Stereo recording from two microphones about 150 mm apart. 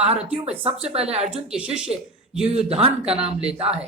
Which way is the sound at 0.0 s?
45° right (ahead or behind).